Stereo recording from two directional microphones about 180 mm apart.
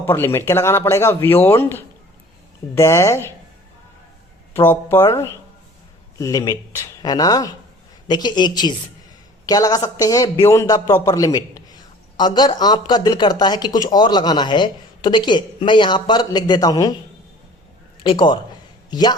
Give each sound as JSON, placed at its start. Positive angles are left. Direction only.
{"t": 0.0, "sound": "speech", "side_deg": 15}
{"t": 4.5, "sound": "a man's voice", "side_deg": 15}
{"t": 18.0, "sound": "a man's voice", "side_deg": 25}